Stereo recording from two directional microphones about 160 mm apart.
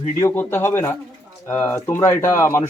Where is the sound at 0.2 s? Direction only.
15° left (ahead or behind).